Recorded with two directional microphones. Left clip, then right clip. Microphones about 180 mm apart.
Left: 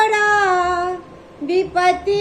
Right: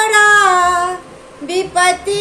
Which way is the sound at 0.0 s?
15° right (ahead or behind).